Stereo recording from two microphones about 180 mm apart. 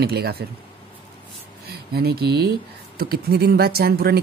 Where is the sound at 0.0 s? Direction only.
60° right (ahead or behind).